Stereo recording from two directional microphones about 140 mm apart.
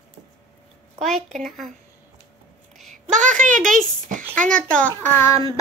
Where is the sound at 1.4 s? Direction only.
5° left (ahead or behind).